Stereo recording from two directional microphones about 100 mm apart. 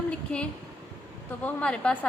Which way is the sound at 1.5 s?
10° left (ahead or behind).